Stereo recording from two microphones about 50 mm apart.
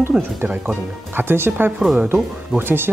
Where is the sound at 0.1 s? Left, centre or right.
Centre.